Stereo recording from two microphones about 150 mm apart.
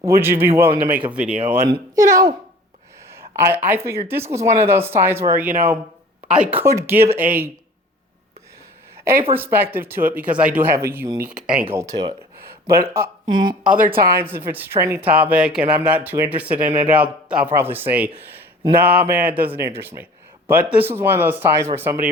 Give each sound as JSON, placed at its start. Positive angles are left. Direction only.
{"t": 0.0, "sound": "speech", "side_deg": -15}
{"t": 1.6, "sound": "speech", "side_deg": -25}
{"t": 3.1, "sound": "a sound", "side_deg": -15}
{"t": 4.1, "sound": "speech", "side_deg": -15}
{"t": 9.3, "sound": "speech", "side_deg": -15}
{"t": 13.2, "sound": "speech", "side_deg": -30}
{"t": 13.7, "sound": "speech", "side_deg": -70}
{"t": 14.2, "sound": "speech", "side_deg": -15}